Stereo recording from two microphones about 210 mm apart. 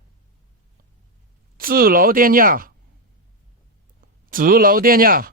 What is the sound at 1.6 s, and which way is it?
Speech, 45° right (ahead or behind).